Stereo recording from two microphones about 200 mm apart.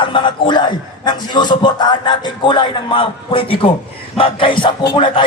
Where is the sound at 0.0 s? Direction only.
25° left (ahead or behind).